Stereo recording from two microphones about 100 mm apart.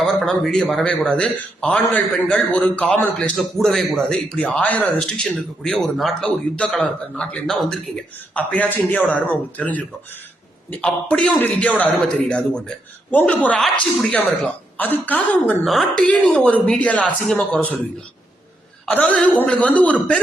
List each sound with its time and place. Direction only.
0.0 s a man's voice: 5° left (ahead or behind)
15.6 s a man's voice: centre (ahead or behind)
18.9 s a man's voice: 15° left (ahead or behind)